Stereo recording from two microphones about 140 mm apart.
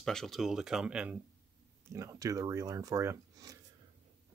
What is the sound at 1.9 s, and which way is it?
Speech, 25° right (ahead or behind).